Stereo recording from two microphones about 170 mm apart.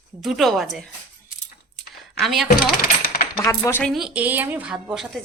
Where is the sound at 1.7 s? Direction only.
Centre (ahead or behind).